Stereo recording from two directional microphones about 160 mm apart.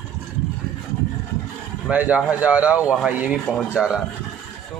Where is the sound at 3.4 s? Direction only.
5° left (ahead or behind).